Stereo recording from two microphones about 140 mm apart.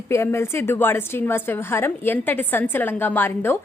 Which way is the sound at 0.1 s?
20° left (ahead or behind).